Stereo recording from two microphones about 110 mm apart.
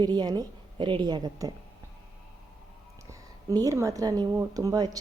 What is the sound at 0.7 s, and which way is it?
Speech, 45° right (ahead or behind).